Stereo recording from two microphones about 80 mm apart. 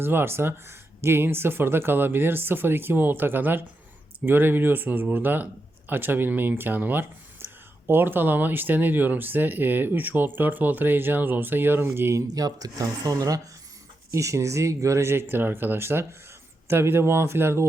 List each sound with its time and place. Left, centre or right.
0.0 s speech: right
12.3 s speech: right